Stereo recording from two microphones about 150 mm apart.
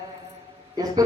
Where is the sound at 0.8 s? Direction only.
25° right (ahead or behind).